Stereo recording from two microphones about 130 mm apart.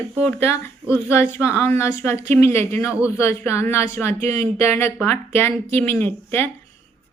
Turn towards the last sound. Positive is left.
turn(degrees=15)  # may be behind; listen again after turning